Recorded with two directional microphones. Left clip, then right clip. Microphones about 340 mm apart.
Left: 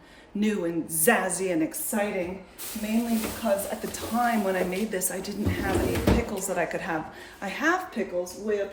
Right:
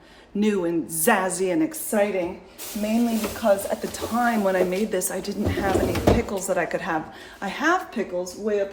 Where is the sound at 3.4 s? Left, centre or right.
Centre.